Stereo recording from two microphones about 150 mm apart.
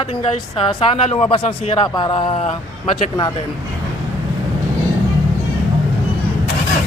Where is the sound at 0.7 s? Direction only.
35° left (ahead or behind).